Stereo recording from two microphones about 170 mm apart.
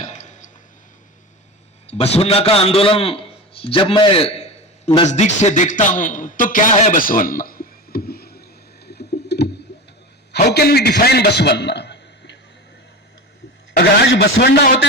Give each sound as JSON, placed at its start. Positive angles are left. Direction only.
{"t": 0.0, "sound": "burping", "side_deg": 45}
{"t": 1.9, "sound": "a man's voice", "side_deg": 35}
{"t": 8.9, "sound": "a sound", "side_deg": 75}
{"t": 10.3, "sound": "a man's voice", "side_deg": 70}
{"t": 13.7, "sound": "a man's voice", "side_deg": 70}